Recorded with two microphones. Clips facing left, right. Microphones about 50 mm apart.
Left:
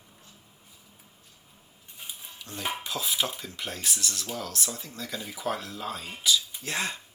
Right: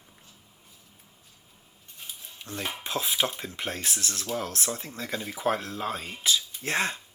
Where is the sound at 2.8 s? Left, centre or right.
Right.